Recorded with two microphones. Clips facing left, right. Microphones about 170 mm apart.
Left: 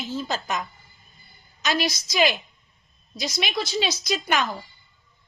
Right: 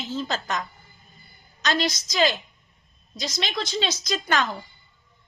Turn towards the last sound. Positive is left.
turn(degrees=10)  # may be behind; listen again after turning